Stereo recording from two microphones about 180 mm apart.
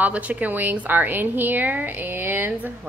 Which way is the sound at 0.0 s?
10° right (ahead or behind).